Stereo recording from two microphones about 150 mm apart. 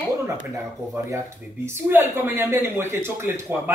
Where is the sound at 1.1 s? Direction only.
15° right (ahead or behind).